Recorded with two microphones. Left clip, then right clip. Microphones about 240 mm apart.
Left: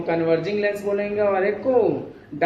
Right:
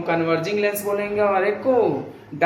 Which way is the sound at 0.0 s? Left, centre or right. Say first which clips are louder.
Even; centre.